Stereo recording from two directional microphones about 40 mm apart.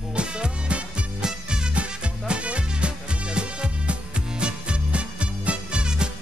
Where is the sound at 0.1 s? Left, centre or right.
Right.